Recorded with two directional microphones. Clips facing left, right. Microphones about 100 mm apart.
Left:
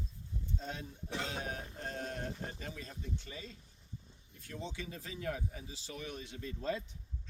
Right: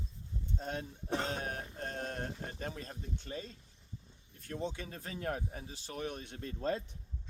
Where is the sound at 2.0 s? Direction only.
50° right (ahead or behind).